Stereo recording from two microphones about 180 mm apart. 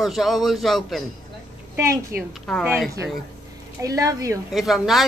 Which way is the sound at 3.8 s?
20° right (ahead or behind).